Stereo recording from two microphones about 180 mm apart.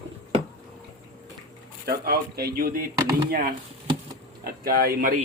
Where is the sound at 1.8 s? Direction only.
60° right (ahead or behind).